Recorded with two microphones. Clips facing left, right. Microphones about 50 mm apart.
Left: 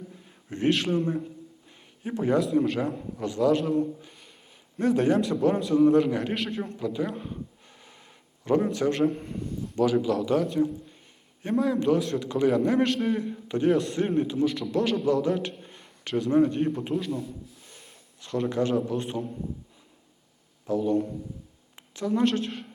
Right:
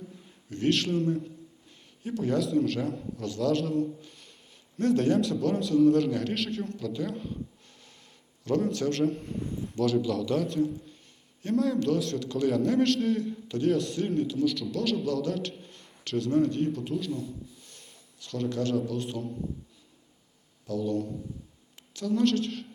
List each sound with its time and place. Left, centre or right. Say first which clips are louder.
0.5 s a man's voice: left 2 dB; left
8.6 s a man's voice: left 3 dB; centre
12.2 s a man's voice: left 3 dB; centre
13.9 s a man's voice: left 3 dB; left
17.1 s rub: left 2 dB; centre
17.7 s a man's voice: left 2 dB; centre
20.7 s a man's voice: left 5 dB; left